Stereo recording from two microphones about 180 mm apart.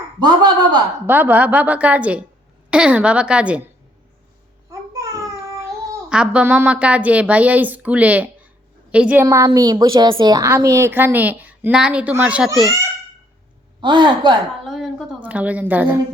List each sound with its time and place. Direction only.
0.2 s a man's voice: 25° right (ahead or behind)
1.0 s a woman's voice: 10° right (ahead or behind)
6.1 s a woman's voice: 5° right (ahead or behind)
9.2 s a woman's voice: 20° right (ahead or behind); by 12.7 s 5° right (ahead or behind)
13.8 s a man's voice: 25° right (ahead or behind)
14.6 s a woman's voice: centre (ahead or behind)